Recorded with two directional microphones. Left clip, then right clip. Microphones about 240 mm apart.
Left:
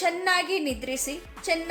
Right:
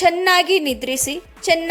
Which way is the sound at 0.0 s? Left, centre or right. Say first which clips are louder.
Right 9 dB; right.